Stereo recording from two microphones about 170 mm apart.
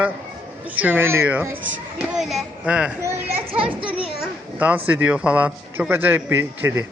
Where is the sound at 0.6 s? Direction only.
10° right (ahead or behind).